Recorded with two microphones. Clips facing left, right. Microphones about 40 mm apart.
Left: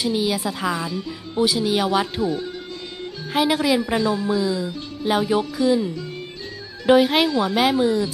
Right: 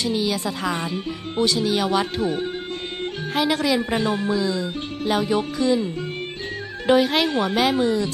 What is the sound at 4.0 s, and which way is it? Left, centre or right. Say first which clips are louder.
Speech: left 1 dB; right.